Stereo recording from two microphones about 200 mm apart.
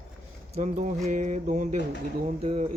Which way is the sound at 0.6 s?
40° right (ahead or behind).